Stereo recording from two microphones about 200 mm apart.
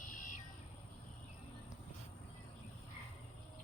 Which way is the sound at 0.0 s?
40° left (ahead or behind).